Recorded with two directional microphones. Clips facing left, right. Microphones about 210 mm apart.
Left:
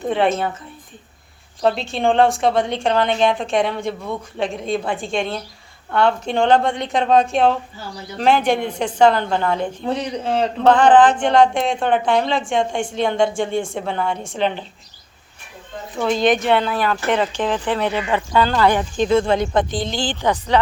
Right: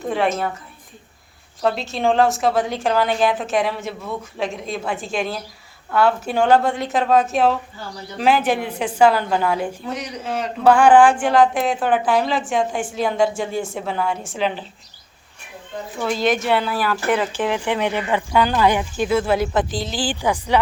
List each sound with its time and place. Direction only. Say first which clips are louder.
1.6 s a woman's voice: left 2 dB; centre (ahead or behind)
9.8 s speech: left 5 dB; 30° left (ahead or behind)
10.7 s a woman's voice: even; 10° right (ahead or behind)
16.0 s speech: left 3 dB; 5° right (ahead or behind)